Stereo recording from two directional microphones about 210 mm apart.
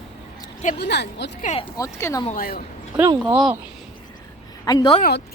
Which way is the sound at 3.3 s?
5° right (ahead or behind).